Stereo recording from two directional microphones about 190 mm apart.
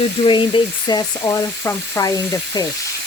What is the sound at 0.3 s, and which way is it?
Frying, 25° left (ahead or behind).